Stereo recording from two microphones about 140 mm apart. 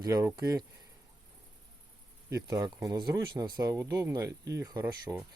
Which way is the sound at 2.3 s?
25° right (ahead or behind).